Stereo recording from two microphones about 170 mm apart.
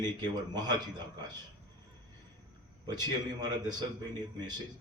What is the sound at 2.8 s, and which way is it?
A man's voice, 25° right (ahead or behind).